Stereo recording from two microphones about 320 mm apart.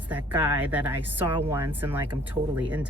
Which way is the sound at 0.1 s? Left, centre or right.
Centre.